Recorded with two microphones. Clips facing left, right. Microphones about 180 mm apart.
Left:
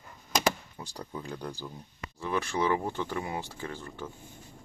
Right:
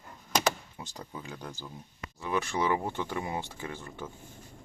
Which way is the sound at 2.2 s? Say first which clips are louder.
Left 1 dB; 15° right (ahead or behind).